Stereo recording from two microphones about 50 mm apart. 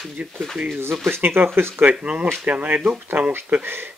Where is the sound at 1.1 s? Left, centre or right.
Right.